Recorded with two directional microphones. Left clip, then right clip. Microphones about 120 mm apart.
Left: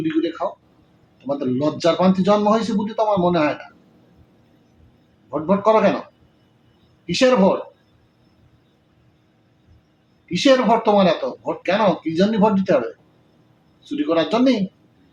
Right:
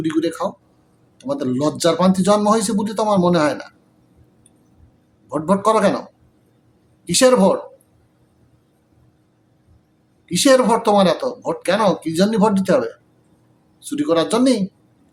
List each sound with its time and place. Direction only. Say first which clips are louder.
0.1 s speech: right 2 dB; 25° right (ahead or behind)
5.3 s speech: even; 25° right (ahead or behind)
7.0 s speech: right 2 dB; 25° right (ahead or behind)
10.2 s speech: right 2 dB; 25° right (ahead or behind)
13.9 s speech: right 2 dB; 20° right (ahead or behind)